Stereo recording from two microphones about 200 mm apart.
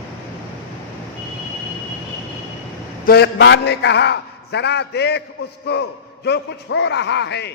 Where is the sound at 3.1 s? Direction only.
55° left (ahead or behind).